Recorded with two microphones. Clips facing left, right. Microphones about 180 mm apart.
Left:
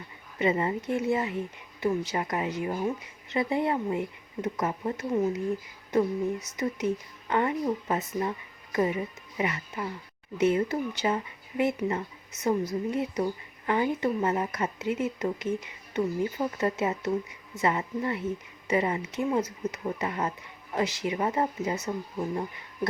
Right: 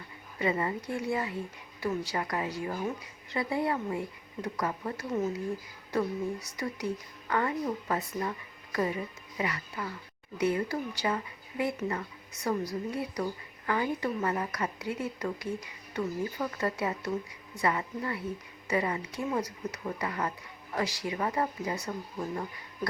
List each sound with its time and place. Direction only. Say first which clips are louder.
0.3 s a woman's voice: left 4 dB; 20° left (ahead or behind)